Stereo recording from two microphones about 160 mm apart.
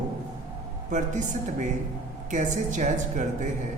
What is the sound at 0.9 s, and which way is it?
Speech, 50° right (ahead or behind).